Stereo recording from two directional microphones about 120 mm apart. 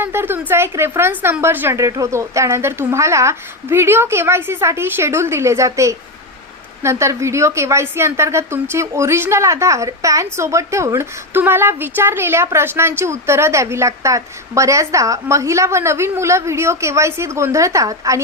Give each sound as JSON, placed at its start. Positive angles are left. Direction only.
{"t": 0.0, "sound": "a woman's voice", "side_deg": -20}